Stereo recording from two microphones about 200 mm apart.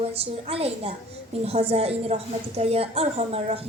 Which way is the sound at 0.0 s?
30° right (ahead or behind).